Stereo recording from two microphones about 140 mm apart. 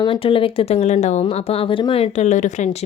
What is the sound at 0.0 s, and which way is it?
A woman's voice, 40° left (ahead or behind).